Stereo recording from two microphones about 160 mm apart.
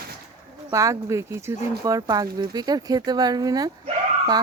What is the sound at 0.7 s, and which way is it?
Speech, 20° right (ahead or behind).